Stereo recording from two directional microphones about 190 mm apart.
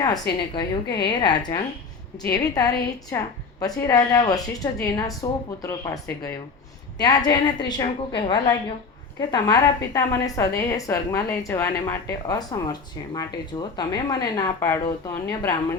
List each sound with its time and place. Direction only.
0.5 s a woman's voice: 25° left (ahead or behind)